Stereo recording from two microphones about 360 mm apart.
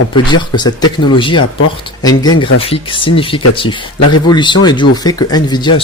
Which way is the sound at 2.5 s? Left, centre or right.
Centre.